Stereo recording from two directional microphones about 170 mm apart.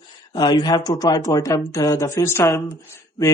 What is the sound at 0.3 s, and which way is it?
Speech, 25° left (ahead or behind).